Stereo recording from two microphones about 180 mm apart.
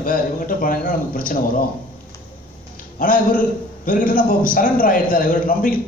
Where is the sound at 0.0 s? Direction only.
50° left (ahead or behind).